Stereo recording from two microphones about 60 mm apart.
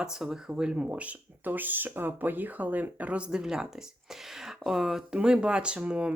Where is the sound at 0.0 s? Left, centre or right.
Centre.